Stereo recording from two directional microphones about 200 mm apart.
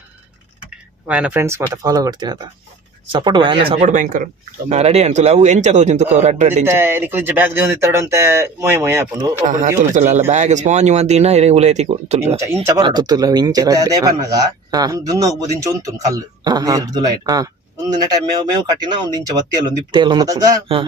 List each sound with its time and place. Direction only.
1.0 s a man's voice: 5° right (ahead or behind); by 6.7 s 35° right (ahead or behind)
6.7 s speech: 10° right (ahead or behind)
9.5 s a man's voice: 40° right (ahead or behind)
12.6 s a man's voice: 20° right (ahead or behind)